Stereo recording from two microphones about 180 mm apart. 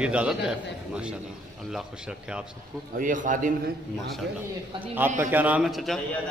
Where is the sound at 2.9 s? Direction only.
45° right (ahead or behind).